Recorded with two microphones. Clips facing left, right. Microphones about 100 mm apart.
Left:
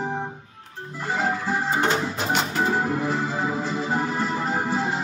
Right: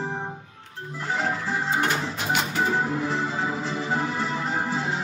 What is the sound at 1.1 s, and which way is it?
Music, 10° left (ahead or behind).